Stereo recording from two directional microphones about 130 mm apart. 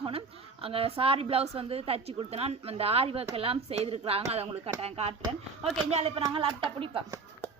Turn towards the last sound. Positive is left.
turn(degrees=-45)  # may be behind; listen again after turning